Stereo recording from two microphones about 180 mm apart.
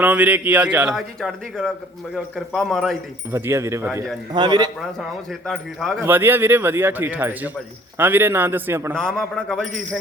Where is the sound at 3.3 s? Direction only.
15° right (ahead or behind).